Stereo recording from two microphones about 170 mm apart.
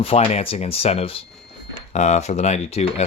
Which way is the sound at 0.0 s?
35° left (ahead or behind).